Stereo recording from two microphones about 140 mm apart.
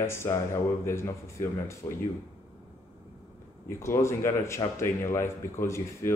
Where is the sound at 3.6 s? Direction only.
20° left (ahead or behind).